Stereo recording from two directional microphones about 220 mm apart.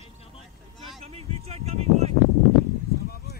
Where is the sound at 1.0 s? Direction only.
30° right (ahead or behind).